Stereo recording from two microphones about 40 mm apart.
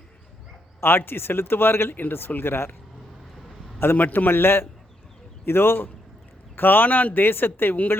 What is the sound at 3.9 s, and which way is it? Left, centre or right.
Speech, left.